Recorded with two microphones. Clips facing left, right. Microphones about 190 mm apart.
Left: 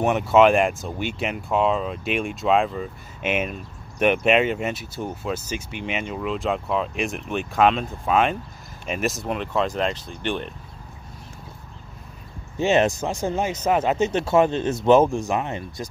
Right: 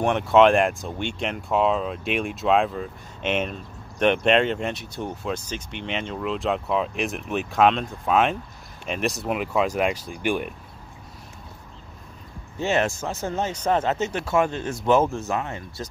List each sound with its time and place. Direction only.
0.0 s speech: 5° left (ahead or behind)
12.5 s speech: 20° left (ahead or behind)